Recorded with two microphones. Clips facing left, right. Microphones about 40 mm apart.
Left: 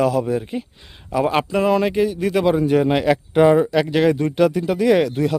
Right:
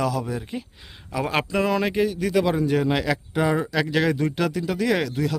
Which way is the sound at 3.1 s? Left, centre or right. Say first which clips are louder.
Left 9 dB; left.